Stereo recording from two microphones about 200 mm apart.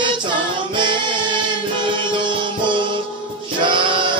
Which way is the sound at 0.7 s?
25° right (ahead or behind).